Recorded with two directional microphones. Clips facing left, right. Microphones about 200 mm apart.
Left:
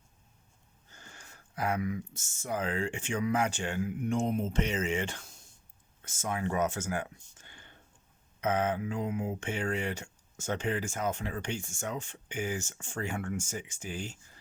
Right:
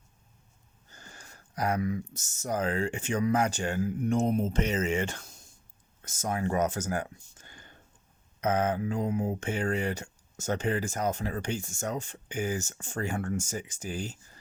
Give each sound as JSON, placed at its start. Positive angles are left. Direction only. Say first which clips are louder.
{"t": 0.9, "sound": "speech", "louder": "right 2 dB", "side_deg": -40}